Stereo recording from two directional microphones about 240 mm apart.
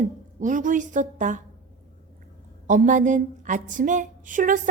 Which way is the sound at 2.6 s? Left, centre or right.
Right.